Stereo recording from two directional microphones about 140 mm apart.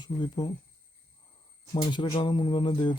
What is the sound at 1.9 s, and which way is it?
Speech, 35° left (ahead or behind).